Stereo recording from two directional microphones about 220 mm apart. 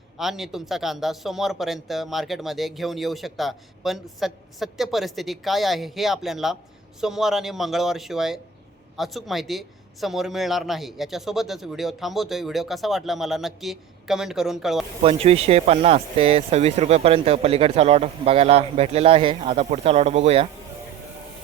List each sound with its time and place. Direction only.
0.2 s speech: centre (ahead or behind)
15.0 s speech: 25° right (ahead or behind)